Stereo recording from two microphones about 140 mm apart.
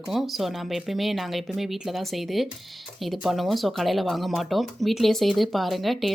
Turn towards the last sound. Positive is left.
turn(degrees=0)  # may be behind; listen again after turning